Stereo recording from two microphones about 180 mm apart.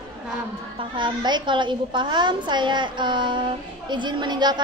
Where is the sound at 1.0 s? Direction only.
25° right (ahead or behind).